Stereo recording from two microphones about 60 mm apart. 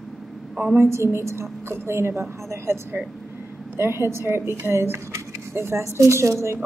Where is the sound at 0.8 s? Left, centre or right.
Right.